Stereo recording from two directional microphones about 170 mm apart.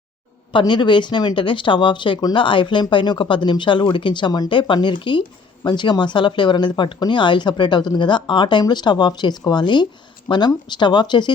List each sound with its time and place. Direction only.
0.5 s speech: 25° left (ahead or behind)